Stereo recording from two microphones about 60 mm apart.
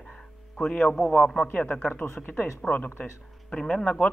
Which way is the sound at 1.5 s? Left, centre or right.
Left.